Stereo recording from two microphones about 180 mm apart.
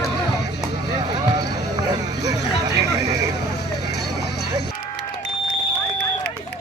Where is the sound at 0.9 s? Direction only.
25° right (ahead or behind).